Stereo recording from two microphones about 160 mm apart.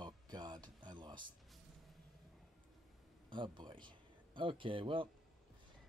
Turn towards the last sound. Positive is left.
turn(degrees=-35)  # may be behind; listen again after turning